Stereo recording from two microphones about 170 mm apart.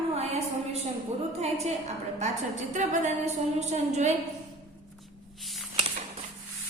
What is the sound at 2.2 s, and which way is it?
A woman's voice, 45° right (ahead or behind).